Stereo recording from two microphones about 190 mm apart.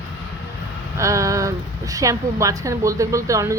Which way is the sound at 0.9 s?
15° right (ahead or behind).